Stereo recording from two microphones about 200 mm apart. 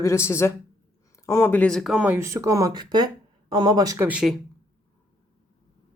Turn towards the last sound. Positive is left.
turn(degrees=-5)  # may be behind; listen again after turning